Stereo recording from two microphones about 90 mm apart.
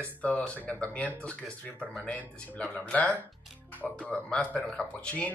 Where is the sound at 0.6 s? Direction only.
15° left (ahead or behind).